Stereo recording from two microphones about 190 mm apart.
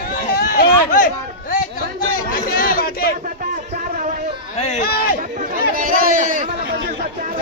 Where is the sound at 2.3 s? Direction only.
50° left (ahead or behind).